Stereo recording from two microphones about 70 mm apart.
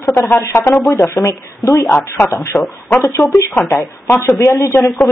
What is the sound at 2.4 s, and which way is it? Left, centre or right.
Speech, left.